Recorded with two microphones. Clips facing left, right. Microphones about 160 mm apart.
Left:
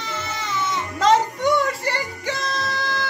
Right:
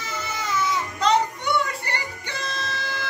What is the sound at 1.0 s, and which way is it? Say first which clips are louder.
Music: left 5 dB; 90° left.